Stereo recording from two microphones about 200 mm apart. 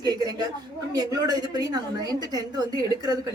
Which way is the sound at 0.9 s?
20° right (ahead or behind).